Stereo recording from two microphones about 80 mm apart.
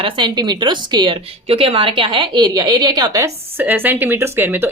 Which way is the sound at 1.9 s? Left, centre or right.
Right.